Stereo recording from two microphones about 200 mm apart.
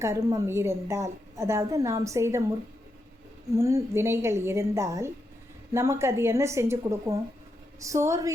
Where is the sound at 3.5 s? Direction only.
15° right (ahead or behind).